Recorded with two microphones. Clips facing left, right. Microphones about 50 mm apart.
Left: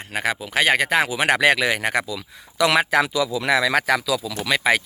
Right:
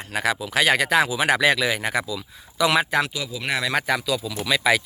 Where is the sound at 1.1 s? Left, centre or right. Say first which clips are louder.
Left 2 dB; left.